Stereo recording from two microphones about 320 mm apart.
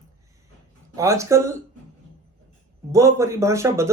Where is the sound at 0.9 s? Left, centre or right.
Centre.